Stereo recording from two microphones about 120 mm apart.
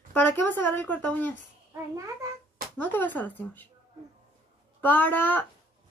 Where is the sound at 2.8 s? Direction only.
15° left (ahead or behind).